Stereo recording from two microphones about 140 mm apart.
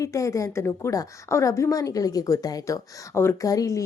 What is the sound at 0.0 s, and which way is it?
A woman's voice, 20° left (ahead or behind).